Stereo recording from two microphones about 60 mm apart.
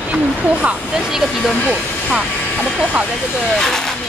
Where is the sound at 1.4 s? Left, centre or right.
Centre.